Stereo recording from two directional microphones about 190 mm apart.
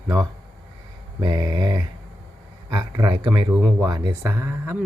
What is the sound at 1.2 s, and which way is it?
Speech, 20° right (ahead or behind).